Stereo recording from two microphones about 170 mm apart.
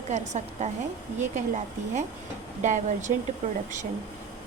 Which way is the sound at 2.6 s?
45° right (ahead or behind).